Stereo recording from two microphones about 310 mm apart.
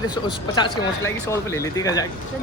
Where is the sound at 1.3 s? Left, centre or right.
Centre.